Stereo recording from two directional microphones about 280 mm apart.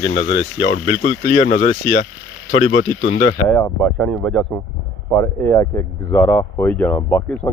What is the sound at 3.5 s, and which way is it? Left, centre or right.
Speech, centre.